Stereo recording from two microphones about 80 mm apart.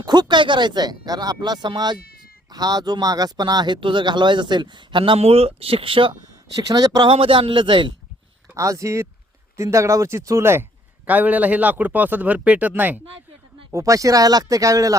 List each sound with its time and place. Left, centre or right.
0.0 s speech: right
2.5 s a man's voice: right
6.6 s speech: right
7.0 s a man's voice: right
8.5 s speech: right
11.0 s a man's voice: centre
13.7 s speech: right